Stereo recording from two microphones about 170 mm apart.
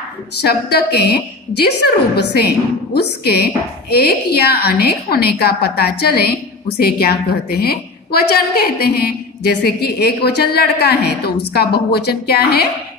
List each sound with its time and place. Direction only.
0.4 s a woman's voice: 70° left (ahead or behind)